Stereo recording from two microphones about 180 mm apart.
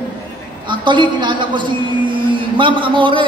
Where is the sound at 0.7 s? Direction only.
25° right (ahead or behind).